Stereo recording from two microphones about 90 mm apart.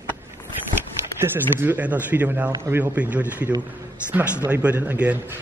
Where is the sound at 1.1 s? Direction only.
25° right (ahead or behind).